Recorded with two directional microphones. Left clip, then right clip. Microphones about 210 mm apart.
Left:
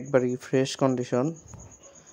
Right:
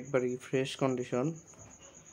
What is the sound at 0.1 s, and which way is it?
Speech, 30° left (ahead or behind).